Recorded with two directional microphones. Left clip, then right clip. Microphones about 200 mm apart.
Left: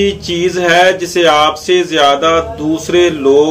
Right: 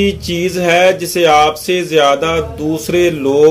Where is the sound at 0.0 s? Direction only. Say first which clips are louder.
Left 2 dB; 40° right (ahead or behind).